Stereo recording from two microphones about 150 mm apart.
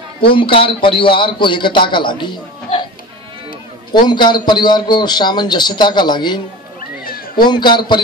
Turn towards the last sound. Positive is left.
turn(degrees=30)  # may be behind; listen again after turning